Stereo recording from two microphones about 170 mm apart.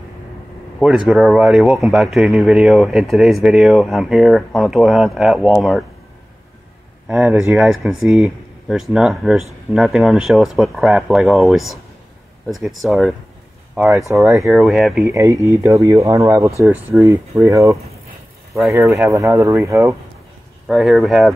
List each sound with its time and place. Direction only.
0.7 s speech: 5° right (ahead or behind)
7.1 s speech: 5° right (ahead or behind)
14.1 s speech: 15° right (ahead or behind)
14.4 s speech: centre (ahead or behind)
15.0 s speech: 15° right (ahead or behind)
20.6 s speech: centre (ahead or behind)